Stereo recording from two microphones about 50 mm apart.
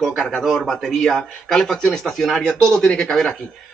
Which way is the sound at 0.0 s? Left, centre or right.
Centre.